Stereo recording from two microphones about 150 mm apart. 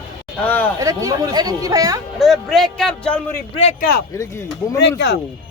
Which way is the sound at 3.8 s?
90° left.